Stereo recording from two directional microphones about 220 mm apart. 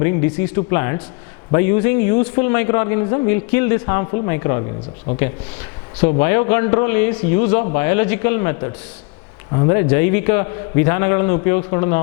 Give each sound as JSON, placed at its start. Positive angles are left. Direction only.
{"t": 0.0, "sound": "a man's voice", "side_deg": 15}
{"t": 6.1, "sound": "a man's voice", "side_deg": 15}